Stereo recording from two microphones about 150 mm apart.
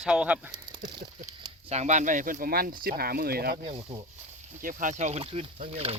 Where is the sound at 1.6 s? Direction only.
50° right (ahead or behind); by 3.6 s 90° right.